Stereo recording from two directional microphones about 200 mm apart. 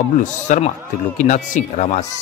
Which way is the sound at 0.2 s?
35° left (ahead or behind).